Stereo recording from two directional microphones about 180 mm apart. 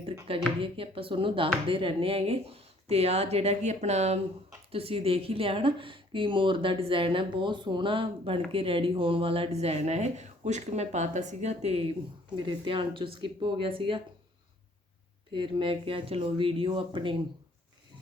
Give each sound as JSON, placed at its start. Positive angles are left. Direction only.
{"t": 0.3, "sound": "speech", "side_deg": -30}
{"t": 15.3, "sound": "speech", "side_deg": -25}